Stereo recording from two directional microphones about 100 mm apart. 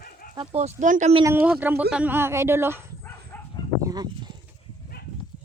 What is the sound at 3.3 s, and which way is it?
Dog, 20° left (ahead or behind).